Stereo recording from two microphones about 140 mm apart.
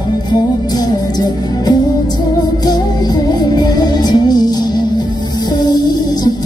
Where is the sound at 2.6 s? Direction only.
30° left (ahead or behind).